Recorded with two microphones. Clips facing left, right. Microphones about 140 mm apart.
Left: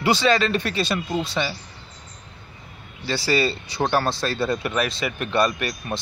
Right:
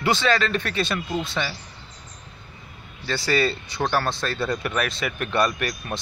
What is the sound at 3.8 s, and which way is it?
Speech, 20° left (ahead or behind).